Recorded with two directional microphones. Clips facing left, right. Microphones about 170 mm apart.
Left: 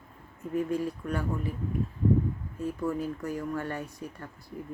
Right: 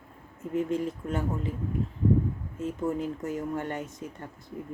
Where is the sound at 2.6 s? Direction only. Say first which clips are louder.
Right 1 dB; 20° right (ahead or behind).